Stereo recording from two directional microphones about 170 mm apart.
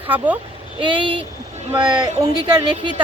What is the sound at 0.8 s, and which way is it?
Speech, 30° right (ahead or behind).